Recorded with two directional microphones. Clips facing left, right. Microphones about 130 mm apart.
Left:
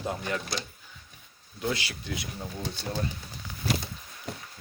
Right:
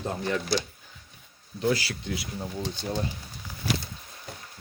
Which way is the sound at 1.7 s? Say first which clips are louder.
Right 4 dB; 20° left (ahead or behind).